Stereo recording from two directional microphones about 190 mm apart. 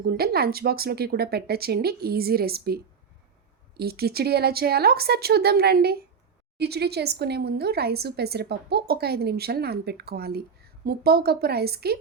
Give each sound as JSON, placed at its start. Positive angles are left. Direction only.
{"t": 0.0, "sound": "speech", "side_deg": -55}